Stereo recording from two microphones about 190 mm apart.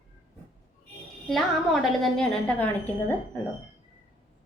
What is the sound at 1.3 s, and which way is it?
A woman's voice, centre (ahead or behind).